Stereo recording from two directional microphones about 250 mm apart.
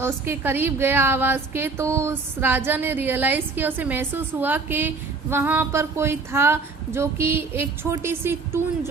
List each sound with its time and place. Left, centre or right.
0.0 s a woman's voice: centre